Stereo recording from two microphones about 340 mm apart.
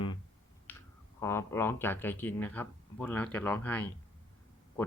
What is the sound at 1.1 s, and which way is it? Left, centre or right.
Speech, centre.